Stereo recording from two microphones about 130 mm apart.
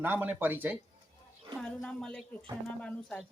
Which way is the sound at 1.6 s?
5° left (ahead or behind).